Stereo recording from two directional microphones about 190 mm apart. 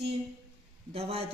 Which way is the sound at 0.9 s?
30° right (ahead or behind).